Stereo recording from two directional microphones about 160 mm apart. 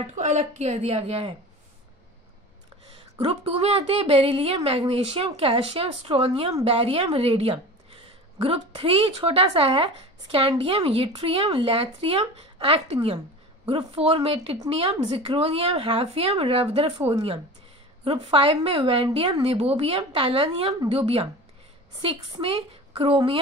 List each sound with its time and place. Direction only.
0.0 s a woman's voice: 45° right (ahead or behind)
3.2 s a woman's voice: 35° right (ahead or behind)